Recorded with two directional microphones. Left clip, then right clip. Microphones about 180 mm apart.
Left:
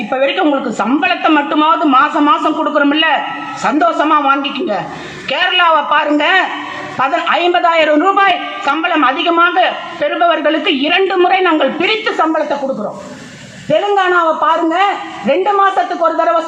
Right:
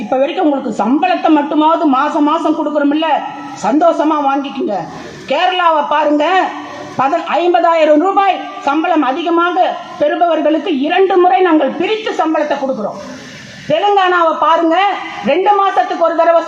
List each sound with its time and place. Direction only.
0.1 s a man's voice: 50° right (ahead or behind); by 12.5 s 35° right (ahead or behind)
13.7 s a man's voice: 30° right (ahead or behind)